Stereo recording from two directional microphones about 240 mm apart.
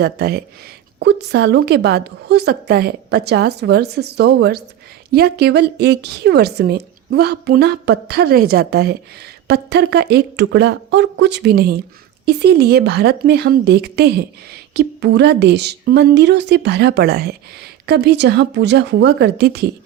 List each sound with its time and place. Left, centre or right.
0.0 s speech: right